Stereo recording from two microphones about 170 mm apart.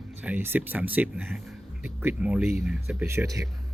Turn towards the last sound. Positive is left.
turn(degrees=-20)  # may be behind; listen again after turning